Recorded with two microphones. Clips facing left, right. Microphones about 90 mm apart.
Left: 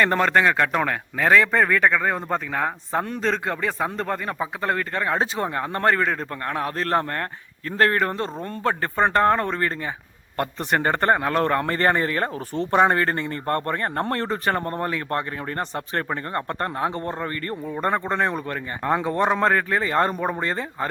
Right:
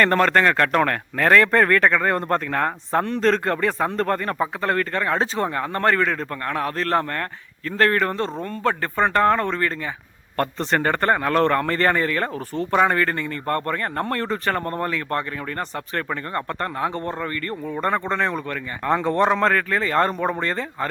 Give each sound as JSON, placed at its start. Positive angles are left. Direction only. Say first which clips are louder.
{"t": 0.0, "sound": "a man's voice", "louder": "right 2 dB", "side_deg": 10}
{"t": 17.7, "sound": "speech", "louder": "right 1 dB", "side_deg": 15}